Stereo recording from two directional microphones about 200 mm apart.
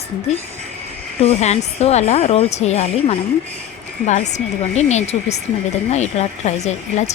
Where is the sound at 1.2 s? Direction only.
35° left (ahead or behind).